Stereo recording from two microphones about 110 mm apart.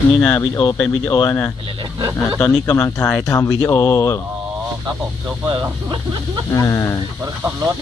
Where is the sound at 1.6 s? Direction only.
50° right (ahead or behind).